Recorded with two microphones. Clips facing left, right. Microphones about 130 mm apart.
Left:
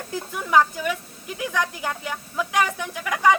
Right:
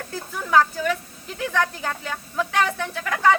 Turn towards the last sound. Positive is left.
turn(degrees=15)  # may be behind; listen again after turning